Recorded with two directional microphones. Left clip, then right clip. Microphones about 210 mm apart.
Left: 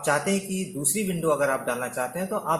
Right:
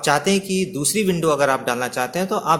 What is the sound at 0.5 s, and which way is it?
Speech, 45° right (ahead or behind).